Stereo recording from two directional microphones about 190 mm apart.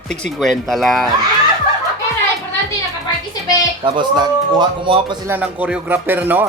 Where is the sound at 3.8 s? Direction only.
25° right (ahead or behind).